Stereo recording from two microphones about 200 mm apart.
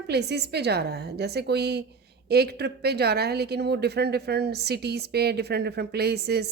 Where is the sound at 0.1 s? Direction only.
55° right (ahead or behind).